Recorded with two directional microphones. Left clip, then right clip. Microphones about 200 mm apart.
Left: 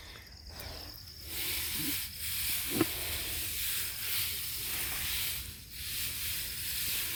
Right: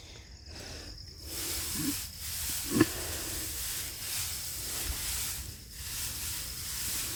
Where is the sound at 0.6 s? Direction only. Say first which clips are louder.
Even; 35° right (ahead or behind).